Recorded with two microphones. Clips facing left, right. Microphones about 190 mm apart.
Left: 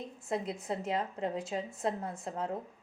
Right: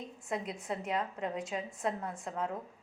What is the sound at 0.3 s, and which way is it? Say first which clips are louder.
A woman's voice: left 2 dB; 30° left (ahead or behind).